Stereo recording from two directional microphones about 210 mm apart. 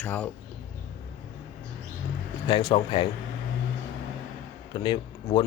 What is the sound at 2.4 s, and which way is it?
Speech, 25° left (ahead or behind).